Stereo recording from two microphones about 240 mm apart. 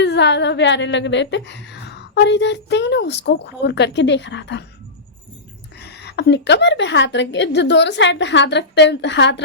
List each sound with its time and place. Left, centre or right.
0.0 s a woman's voice: left
5.8 s a woman's voice: left